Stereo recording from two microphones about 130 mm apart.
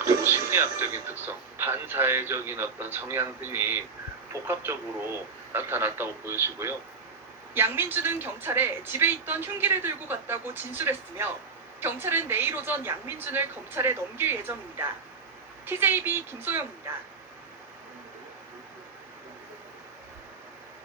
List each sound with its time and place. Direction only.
0.0 s speech: 20° right (ahead or behind)